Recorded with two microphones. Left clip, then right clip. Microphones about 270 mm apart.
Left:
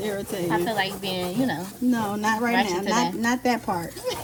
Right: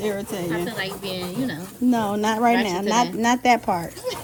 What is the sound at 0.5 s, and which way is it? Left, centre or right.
Speech, centre.